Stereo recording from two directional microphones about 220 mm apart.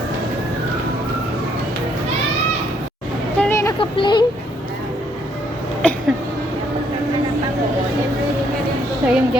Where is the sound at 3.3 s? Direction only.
10° left (ahead or behind).